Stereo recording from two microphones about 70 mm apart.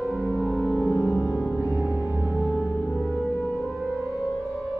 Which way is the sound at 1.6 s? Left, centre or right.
Centre.